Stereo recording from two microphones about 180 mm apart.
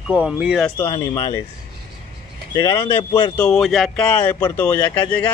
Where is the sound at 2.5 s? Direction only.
15° left (ahead or behind).